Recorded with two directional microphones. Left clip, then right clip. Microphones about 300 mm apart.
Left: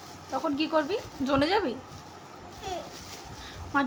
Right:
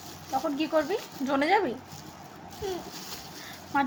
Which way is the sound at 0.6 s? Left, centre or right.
Centre.